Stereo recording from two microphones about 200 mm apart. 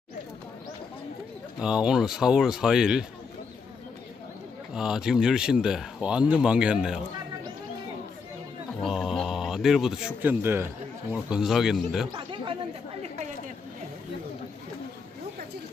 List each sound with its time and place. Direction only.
1.6 s speech: 5° right (ahead or behind)
4.7 s speech: 5° right (ahead or behind)
8.8 s speech: centre (ahead or behind)
12.1 s speech: 25° right (ahead or behind)